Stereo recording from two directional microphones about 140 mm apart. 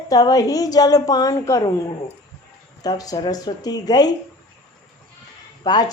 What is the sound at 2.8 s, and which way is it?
A woman's voice, 25° left (ahead or behind).